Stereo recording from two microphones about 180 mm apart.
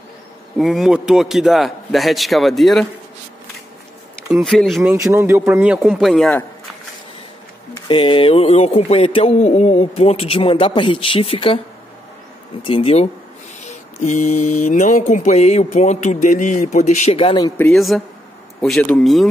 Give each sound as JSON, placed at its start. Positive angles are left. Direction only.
{"t": 0.6, "sound": "a man's voice", "side_deg": 0}
{"t": 4.3, "sound": "a man's voice", "side_deg": 0}
{"t": 5.0, "sound": "a man's voice", "side_deg": -15}
{"t": 7.9, "sound": "speech", "side_deg": 30}
{"t": 12.6, "sound": "speech", "side_deg": 30}
{"t": 17.4, "sound": "speech", "side_deg": 10}
{"t": 17.7, "sound": "a man's voice", "side_deg": 0}